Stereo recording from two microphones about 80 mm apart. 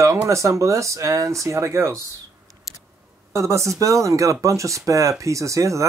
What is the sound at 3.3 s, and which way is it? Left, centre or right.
Speech, right.